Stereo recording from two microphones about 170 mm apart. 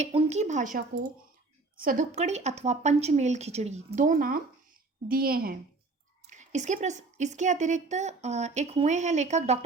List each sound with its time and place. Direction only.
0.0 s a woman's voice: 40° right (ahead or behind); by 2.0 s 55° right (ahead or behind)
2.1 s a woman's voice: 40° right (ahead or behind); by 5.5 s 60° right (ahead or behind)
6.3 s a woman's voice: 45° right (ahead or behind)